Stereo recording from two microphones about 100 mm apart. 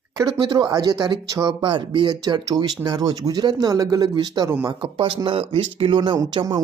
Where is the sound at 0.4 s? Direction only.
50° right (ahead or behind).